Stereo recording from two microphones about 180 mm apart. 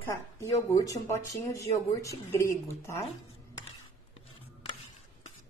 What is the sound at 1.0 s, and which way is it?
Speech, 15° left (ahead or behind).